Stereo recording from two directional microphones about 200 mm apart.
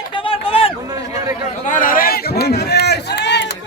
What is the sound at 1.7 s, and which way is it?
Run, 45° left (ahead or behind).